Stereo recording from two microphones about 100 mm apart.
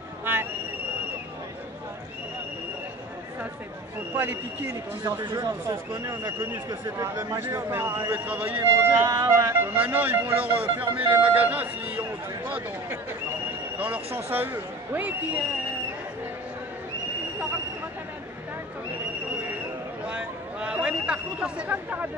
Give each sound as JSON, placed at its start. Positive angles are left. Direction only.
{"t": 0.2, "sound": "speech", "side_deg": -20}
{"t": 5.0, "sound": "speech", "side_deg": -35}
{"t": 6.7, "sound": "speech", "side_deg": -30}
{"t": 8.1, "sound": "a man's voice", "side_deg": -15}
{"t": 9.0, "sound": "speech", "side_deg": -35}
{"t": 9.8, "sound": "a man's voice", "side_deg": -15}
{"t": 20.1, "sound": "a sound", "side_deg": -10}